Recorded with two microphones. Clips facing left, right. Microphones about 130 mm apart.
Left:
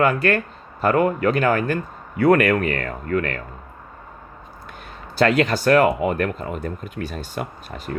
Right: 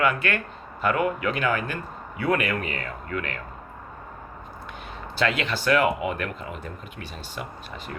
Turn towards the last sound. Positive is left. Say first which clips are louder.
# left 6 dB
turn(degrees=45)  # may be behind; listen again after turning